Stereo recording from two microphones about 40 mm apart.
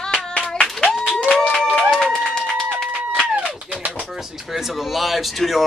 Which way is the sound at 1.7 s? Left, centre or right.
Centre.